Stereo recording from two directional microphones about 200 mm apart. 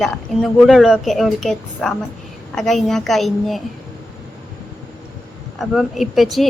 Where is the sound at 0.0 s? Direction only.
Centre (ahead or behind).